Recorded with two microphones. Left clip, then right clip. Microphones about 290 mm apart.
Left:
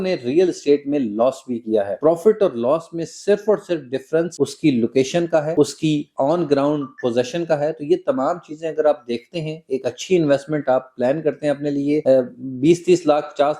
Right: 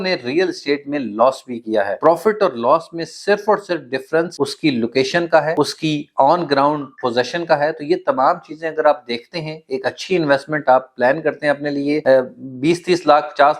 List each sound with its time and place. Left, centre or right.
0.0 s speech: right